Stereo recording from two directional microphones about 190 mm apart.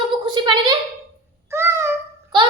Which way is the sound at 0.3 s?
25° right (ahead or behind).